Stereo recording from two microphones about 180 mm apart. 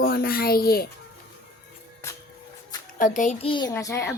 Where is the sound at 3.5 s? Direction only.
25° left (ahead or behind).